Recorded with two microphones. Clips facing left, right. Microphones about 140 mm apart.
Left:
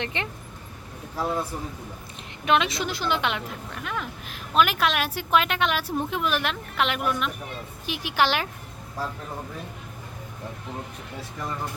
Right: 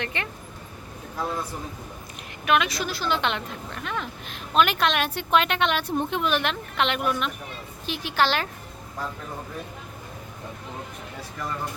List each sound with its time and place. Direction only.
0.0 s speech: 20° left (ahead or behind)
2.4 s a woman's voice: 25° left (ahead or behind); by 7.3 s centre (ahead or behind)
7.9 s a woman's voice: 15° left (ahead or behind)